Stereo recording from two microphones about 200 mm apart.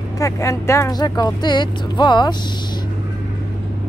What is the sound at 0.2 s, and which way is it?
Speech, 15° left (ahead or behind).